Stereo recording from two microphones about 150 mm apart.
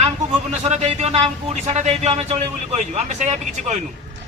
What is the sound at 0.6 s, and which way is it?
Speech, 45° right (ahead or behind).